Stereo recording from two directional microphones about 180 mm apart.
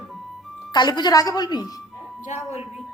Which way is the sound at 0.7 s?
25° left (ahead or behind).